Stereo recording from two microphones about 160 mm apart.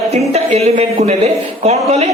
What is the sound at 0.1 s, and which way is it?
A man's voice, 45° right (ahead or behind).